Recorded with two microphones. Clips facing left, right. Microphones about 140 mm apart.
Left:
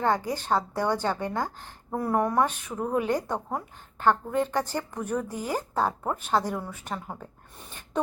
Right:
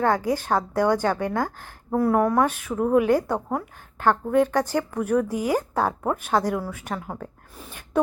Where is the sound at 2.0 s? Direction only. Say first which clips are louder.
Right 4 dB; centre (ahead or behind).